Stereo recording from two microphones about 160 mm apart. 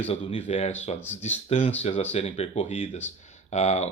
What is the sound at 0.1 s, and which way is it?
Speech, 35° left (ahead or behind).